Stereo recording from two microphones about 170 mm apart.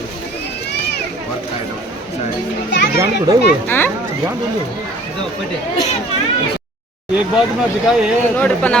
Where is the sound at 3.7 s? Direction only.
10° left (ahead or behind).